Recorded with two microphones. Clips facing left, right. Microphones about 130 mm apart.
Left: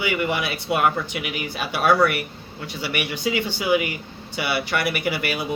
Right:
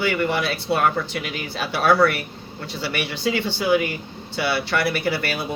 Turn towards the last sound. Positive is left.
turn(degrees=15)  # may be behind; listen again after turning